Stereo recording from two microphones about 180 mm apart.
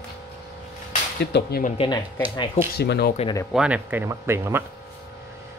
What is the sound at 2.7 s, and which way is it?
Speech, 65° left (ahead or behind).